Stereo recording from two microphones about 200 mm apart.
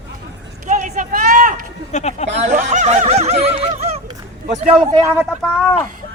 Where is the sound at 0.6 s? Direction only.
35° right (ahead or behind).